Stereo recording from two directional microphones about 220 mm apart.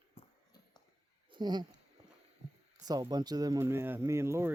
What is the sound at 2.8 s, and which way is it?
Speech, 15° right (ahead or behind).